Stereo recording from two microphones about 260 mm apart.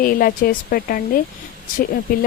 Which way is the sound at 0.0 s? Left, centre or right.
Left.